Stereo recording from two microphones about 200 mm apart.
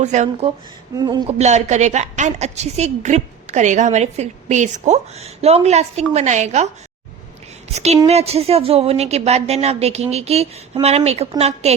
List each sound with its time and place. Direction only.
0.0 s a woman's voice: 35° right (ahead or behind)
0.9 s speech: 20° right (ahead or behind)
1.4 s a woman's voice: 35° right (ahead or behind)
8.0 s a woman's voice: 30° right (ahead or behind)